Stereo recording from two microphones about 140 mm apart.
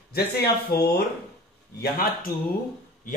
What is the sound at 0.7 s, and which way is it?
Speech, 90° left.